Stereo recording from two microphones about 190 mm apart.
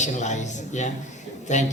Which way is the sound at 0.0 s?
40° left (ahead or behind).